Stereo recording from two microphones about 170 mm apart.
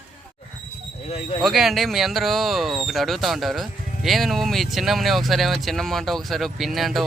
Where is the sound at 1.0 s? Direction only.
35° left (ahead or behind).